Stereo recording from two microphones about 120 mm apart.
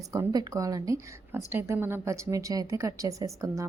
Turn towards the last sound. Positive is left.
turn(degrees=-25)  # may be behind; listen again after turning